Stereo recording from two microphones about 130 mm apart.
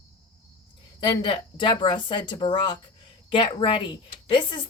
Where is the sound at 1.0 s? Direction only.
40° left (ahead or behind).